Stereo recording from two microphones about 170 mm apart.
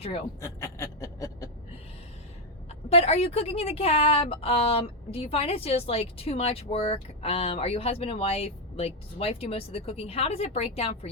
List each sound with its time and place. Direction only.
0.0 s a woman's voice: 35° left (ahead or behind)
0.4 s a sound: 15° left (ahead or behind)
2.9 s a woman's voice: 35° left (ahead or behind)